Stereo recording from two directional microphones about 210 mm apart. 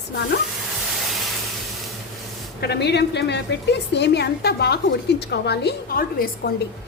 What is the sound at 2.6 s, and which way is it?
A woman's voice, 50° left (ahead or behind).